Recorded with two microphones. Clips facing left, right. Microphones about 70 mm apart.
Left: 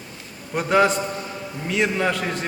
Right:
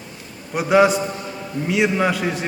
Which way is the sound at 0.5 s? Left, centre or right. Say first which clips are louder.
Right 3 dB; centre.